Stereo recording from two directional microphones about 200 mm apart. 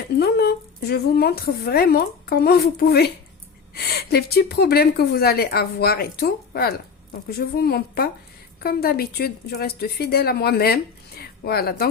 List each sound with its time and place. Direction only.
0.2 s speech: 55° left (ahead or behind)